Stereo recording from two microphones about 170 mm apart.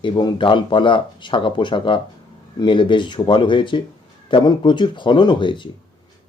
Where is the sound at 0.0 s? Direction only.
25° left (ahead or behind).